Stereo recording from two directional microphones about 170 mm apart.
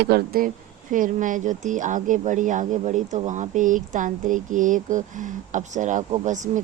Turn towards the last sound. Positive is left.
turn(degrees=-45)  # may be behind; listen again after turning